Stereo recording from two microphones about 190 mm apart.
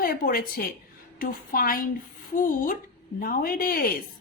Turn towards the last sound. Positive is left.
turn(degrees=50)  # may be behind; listen again after turning